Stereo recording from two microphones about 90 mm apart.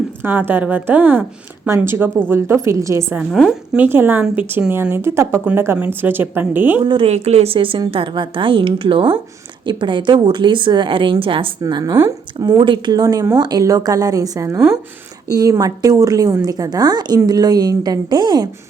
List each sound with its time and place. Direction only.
0.2 s a woman's voice: 25° right (ahead or behind)
6.8 s a woman's voice: 80° right
11.7 s a woman's voice: 45° right (ahead or behind)
12.5 s a woman's voice: 65° right (ahead or behind)
12.9 s a woman's voice: 45° right (ahead or behind)